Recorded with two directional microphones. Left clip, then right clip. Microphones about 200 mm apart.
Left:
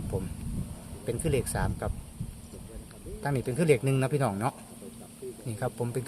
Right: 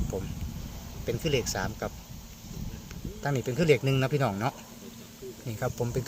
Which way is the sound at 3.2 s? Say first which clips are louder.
Right 1 dB; centre (ahead or behind).